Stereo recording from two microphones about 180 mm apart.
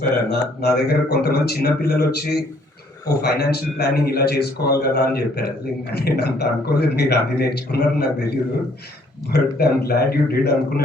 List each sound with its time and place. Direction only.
0.3 s a man's voice: 65° left (ahead or behind)
9.3 s a man's voice: 60° left (ahead or behind)